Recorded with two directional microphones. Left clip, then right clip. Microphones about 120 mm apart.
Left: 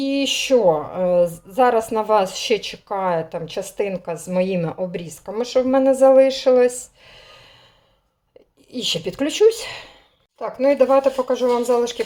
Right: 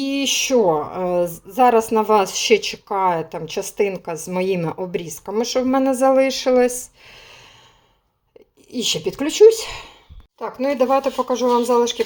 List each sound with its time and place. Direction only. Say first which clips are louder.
0.0 s speech: even; 25° right (ahead or behind)
8.7 s a woman's voice: right 1 dB; 15° right (ahead or behind)
9.0 s speech: right 5 dB; 5° right (ahead or behind)